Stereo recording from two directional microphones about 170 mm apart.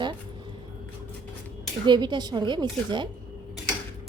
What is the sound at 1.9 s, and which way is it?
A woman's voice, 25° right (ahead or behind).